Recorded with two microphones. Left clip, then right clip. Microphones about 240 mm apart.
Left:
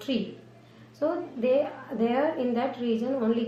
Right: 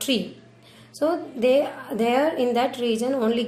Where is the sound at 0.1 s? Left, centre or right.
Right.